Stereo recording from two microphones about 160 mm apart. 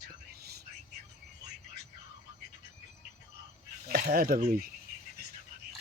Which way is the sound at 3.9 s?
70° right (ahead or behind).